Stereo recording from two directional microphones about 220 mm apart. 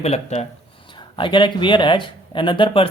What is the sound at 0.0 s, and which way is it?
Speech, 30° left (ahead or behind).